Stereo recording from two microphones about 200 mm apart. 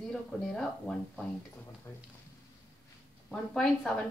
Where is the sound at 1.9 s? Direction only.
15° left (ahead or behind).